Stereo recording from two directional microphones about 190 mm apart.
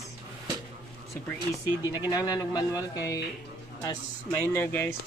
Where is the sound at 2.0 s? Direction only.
20° left (ahead or behind).